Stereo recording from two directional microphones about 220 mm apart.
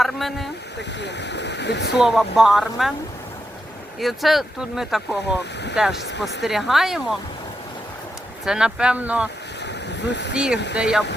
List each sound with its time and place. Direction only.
0.0 s speech: centre (ahead or behind)
0.8 s speech: 50° left (ahead or behind)
2.0 s speech: centre (ahead or behind)
4.0 s speech: centre (ahead or behind)
6.0 s speech: 50° left (ahead or behind)
6.4 s speech: centre (ahead or behind)
8.4 s speech: 5° right (ahead or behind)
9.6 s vehicle: 50° left (ahead or behind)
10.3 s speech: 5° right (ahead or behind)